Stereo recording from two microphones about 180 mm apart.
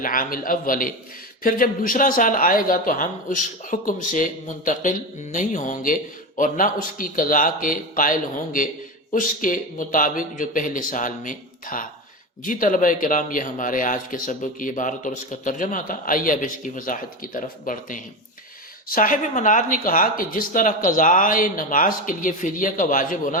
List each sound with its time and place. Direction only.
0.0 s speech: 50° left (ahead or behind)